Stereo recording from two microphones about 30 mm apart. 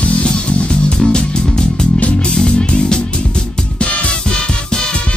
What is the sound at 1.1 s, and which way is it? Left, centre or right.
Music, left.